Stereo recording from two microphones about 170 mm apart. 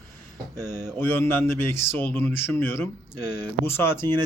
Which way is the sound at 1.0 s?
15° left (ahead or behind).